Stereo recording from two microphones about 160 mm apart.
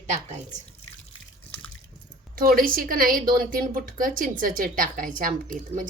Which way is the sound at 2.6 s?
60° right (ahead or behind).